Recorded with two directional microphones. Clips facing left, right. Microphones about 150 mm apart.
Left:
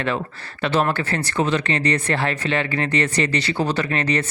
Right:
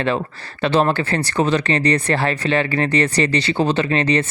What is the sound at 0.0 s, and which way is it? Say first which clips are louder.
Speech: right 3 dB; 30° right (ahead or behind).